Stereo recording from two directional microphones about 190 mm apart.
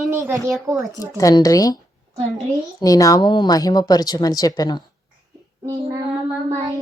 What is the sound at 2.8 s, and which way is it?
Speech, 20° left (ahead or behind).